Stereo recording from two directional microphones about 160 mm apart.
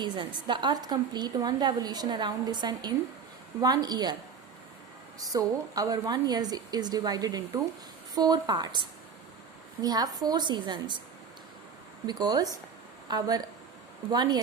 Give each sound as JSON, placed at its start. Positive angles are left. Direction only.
{"t": 0.0, "sound": "a woman's voice", "side_deg": -30}
{"t": 5.2, "sound": "a woman's voice", "side_deg": -20}
{"t": 12.0, "sound": "a woman's voice", "side_deg": -25}